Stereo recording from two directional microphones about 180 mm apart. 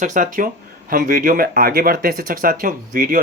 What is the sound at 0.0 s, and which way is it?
Speech, 45° right (ahead or behind).